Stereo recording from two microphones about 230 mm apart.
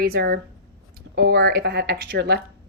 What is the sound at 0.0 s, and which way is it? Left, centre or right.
Speech, right.